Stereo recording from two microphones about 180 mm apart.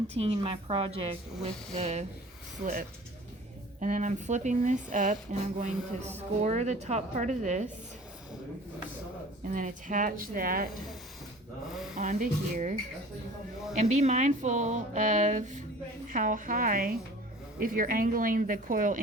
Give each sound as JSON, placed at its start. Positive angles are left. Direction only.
{"t": 0.1, "sound": "speech", "side_deg": -35}
{"t": 3.8, "sound": "speech", "side_deg": -45}
{"t": 9.5, "sound": "speech", "side_deg": -45}
{"t": 11.9, "sound": "speech", "side_deg": -45}
{"t": 13.7, "sound": "speech", "side_deg": -40}